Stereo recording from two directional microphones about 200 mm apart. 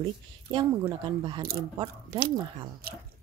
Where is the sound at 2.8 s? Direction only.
50° right (ahead or behind).